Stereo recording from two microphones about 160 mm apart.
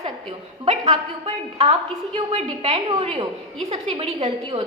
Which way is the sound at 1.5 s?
40° right (ahead or behind).